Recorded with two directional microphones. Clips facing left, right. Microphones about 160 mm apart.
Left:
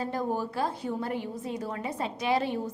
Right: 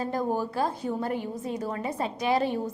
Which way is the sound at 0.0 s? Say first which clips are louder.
Right 2 dB; 45° right (ahead or behind).